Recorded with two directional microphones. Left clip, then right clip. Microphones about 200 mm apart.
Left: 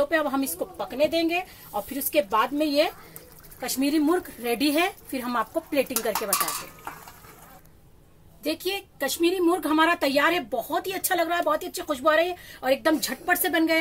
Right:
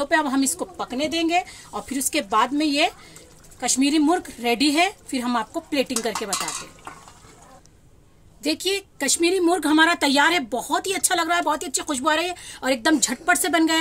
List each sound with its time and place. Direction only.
0.0 s a woman's voice: 45° right (ahead or behind)
8.4 s a woman's voice: 50° right (ahead or behind)